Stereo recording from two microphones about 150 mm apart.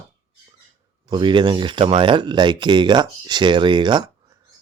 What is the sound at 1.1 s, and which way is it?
Speech, 30° right (ahead or behind).